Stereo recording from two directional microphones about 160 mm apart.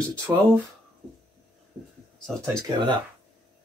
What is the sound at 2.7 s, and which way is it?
Speech, 30° right (ahead or behind).